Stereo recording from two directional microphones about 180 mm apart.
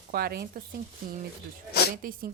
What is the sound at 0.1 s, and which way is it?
Speech, 60° right (ahead or behind).